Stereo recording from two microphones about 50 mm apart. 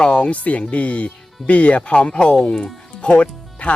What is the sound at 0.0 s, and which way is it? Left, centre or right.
Speech, left.